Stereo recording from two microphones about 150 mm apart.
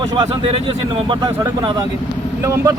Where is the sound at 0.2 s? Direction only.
40° right (ahead or behind).